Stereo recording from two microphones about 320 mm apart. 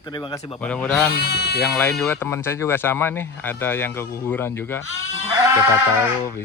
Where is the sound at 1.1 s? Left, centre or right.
Left.